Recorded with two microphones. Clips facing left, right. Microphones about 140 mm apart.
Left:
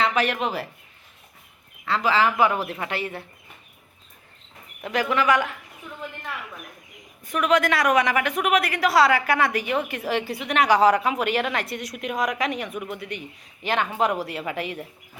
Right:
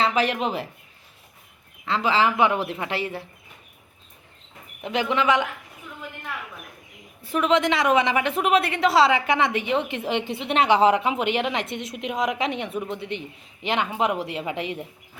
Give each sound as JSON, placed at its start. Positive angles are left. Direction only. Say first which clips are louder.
{"t": 0.0, "sound": "a sound", "louder": "right 1 dB", "side_deg": -30}
{"t": 0.4, "sound": "a woman's voice", "louder": "right 1 dB", "side_deg": -25}
{"t": 1.8, "sound": "a woman's voice", "louder": "even", "side_deg": -25}
{"t": 4.9, "sound": "a woman's voice", "louder": "even", "side_deg": -20}
{"t": 7.2, "sound": "a woman's voice", "louder": "even", "side_deg": -25}